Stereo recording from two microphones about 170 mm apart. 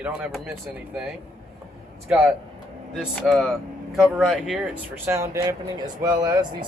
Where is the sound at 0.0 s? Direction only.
5° right (ahead or behind).